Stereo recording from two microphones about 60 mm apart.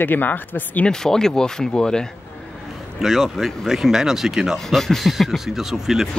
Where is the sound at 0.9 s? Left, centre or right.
Centre.